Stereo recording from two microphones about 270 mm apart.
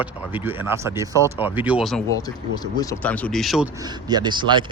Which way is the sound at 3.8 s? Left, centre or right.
Centre.